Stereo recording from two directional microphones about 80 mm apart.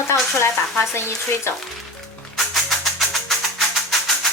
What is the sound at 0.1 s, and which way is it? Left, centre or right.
Sizzle, left.